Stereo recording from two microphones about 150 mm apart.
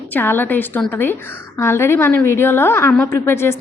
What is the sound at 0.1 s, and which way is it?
A woman's voice, 15° left (ahead or behind).